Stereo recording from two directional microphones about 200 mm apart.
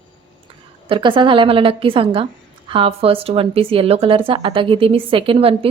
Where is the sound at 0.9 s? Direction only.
25° right (ahead or behind).